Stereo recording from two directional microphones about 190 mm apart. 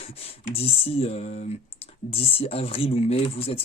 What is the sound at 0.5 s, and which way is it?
Speech, 30° left (ahead or behind).